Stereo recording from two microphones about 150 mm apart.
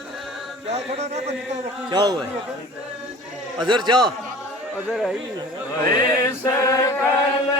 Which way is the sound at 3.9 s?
30° right (ahead or behind).